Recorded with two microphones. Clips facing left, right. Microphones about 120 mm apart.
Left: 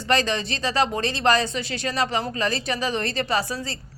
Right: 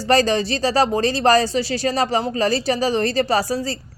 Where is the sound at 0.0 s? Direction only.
35° right (ahead or behind).